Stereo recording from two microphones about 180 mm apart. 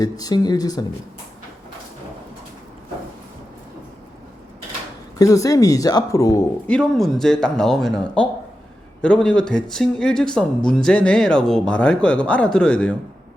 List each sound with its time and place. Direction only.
0.0 s speech: 20° left (ahead or behind)
5.1 s speech: 20° left (ahead or behind)
6.7 s speech: 5° left (ahead or behind)